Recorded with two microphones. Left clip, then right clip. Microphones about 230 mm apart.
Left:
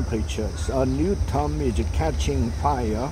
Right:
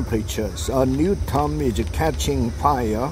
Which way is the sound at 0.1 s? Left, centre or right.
Right.